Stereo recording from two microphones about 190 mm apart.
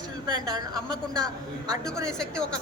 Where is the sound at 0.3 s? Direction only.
25° right (ahead or behind).